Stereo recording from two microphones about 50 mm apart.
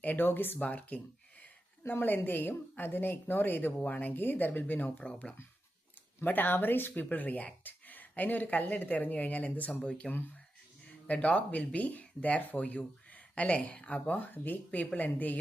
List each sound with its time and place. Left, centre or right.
0.0 s speech: left
4.9 s speech: left
6.2 s speech: left
11.1 s speech: left